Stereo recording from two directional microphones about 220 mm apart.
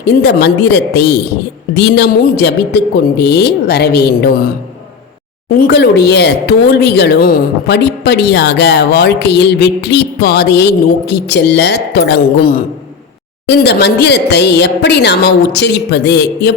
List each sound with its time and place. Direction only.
0.0 s speech: 50° left (ahead or behind)
5.5 s speech: 45° left (ahead or behind)